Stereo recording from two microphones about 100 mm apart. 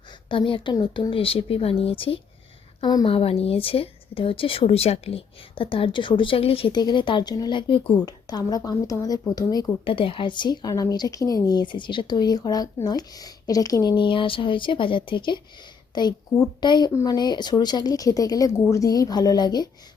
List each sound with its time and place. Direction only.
0.3 s speech: 60° left (ahead or behind)
2.8 s speech: 45° left (ahead or behind)
3.1 s speech: 75° left (ahead or behind)
6.7 s speech: 50° left (ahead or behind)
9.8 s speech: 60° left (ahead or behind); by 11.6 s 35° left (ahead or behind)
11.6 s speech: 55° left (ahead or behind); by 13.9 s 40° left (ahead or behind)
13.9 s speech: 55° left (ahead or behind)
16.9 s speech: 35° left (ahead or behind)